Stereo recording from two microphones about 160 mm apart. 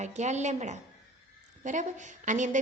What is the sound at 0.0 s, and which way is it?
A woman's voice, 45° right (ahead or behind).